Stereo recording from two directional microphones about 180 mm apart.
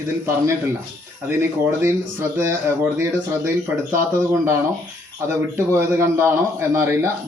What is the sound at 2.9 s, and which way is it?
A man's voice, 15° right (ahead or behind).